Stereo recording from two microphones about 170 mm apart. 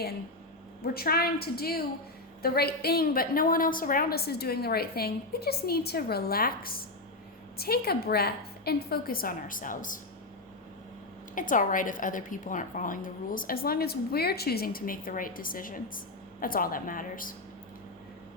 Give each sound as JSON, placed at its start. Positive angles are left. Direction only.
{"t": 0.8, "sound": "a woman's voice", "side_deg": 65}
{"t": 11.3, "sound": "a woman's voice", "side_deg": 50}